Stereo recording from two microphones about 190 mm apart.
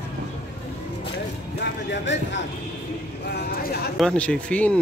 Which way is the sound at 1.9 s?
70° left (ahead or behind).